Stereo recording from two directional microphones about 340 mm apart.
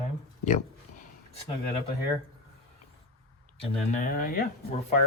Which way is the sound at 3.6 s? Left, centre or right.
Left.